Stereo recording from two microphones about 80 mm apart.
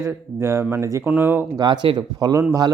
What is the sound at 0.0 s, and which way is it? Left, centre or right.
Speech, right.